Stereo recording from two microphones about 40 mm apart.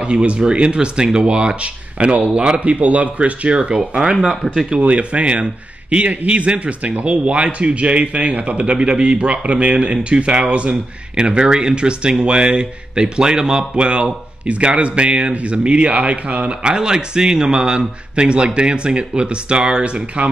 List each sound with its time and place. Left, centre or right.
0.0 s speech: right
4.6 s speech: right